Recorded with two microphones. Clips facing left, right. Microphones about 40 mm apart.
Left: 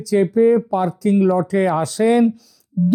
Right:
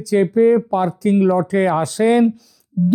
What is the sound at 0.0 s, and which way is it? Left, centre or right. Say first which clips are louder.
Speech: right 1 dB; right.